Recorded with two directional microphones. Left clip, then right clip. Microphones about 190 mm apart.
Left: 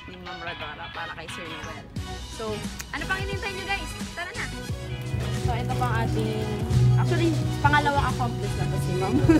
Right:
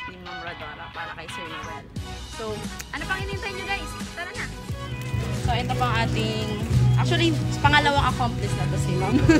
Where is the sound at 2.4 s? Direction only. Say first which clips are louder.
Even; centre (ahead or behind).